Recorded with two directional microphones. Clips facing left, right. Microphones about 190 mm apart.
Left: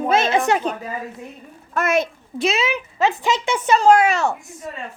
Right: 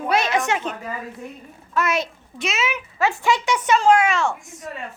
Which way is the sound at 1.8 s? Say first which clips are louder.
Left 3 dB; 50° left (ahead or behind).